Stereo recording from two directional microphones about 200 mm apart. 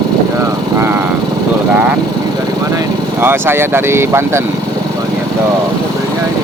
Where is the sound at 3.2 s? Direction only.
10° right (ahead or behind).